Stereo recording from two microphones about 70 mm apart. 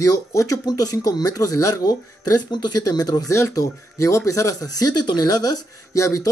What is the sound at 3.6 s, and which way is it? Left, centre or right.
Speech, left.